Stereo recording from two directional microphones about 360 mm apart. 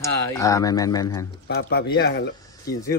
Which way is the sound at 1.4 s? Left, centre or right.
Left.